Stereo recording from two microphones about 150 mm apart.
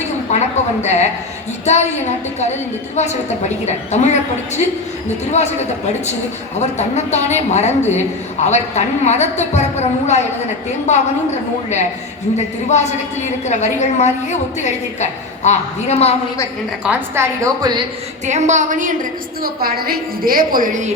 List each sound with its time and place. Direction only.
0.3 s a woman's voice: 50° left (ahead or behind)
6.6 s a woman's voice: 50° left (ahead or behind)
12.6 s a woman's voice: 50° left (ahead or behind)
16.8 s a woman's voice: 10° right (ahead or behind)
17.4 s a woman's voice: 25° right (ahead or behind)
18.3 s a woman's voice: 50° right (ahead or behind)
19.4 s a woman's voice: 85° right; by 20.7 s 70° right (ahead or behind)